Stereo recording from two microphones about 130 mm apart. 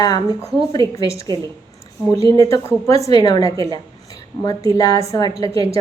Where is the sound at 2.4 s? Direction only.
25° left (ahead or behind).